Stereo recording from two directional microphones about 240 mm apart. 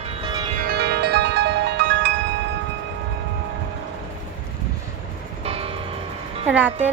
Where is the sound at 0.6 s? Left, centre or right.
Right.